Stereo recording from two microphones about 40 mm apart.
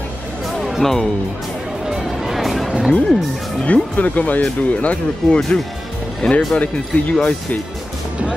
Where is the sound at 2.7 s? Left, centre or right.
Centre.